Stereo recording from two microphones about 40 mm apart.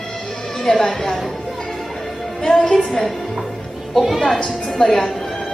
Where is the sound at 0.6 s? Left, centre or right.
Centre.